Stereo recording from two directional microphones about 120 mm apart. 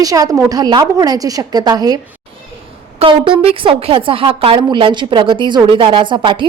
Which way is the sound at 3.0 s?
50° right (ahead or behind).